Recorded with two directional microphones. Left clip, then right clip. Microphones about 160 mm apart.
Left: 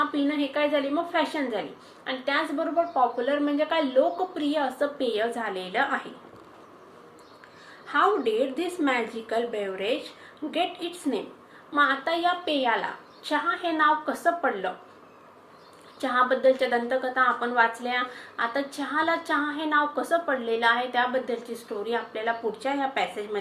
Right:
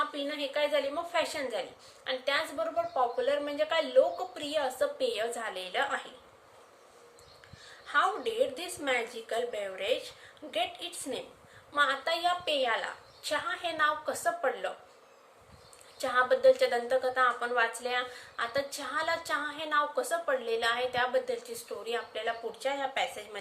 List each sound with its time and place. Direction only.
0.0 s a woman's voice: 45° right (ahead or behind)
7.9 s a woman's voice: 35° right (ahead or behind); by 14.3 s 50° right (ahead or behind)
16.0 s a woman's voice: 40° right (ahead or behind)